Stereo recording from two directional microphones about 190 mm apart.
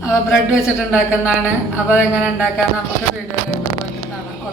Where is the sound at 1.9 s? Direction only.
10° left (ahead or behind).